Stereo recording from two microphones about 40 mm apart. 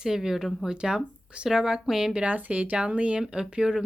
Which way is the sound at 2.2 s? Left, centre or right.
Right.